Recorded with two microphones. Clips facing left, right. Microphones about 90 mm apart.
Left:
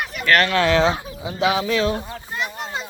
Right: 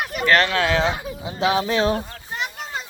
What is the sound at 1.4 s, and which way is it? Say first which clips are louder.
Speech: even; 35° right (ahead or behind).